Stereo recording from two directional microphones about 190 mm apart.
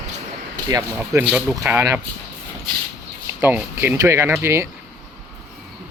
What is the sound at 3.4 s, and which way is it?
Speech, 10° right (ahead or behind).